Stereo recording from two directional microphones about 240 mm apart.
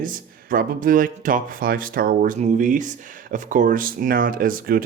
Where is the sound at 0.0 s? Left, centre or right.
Right.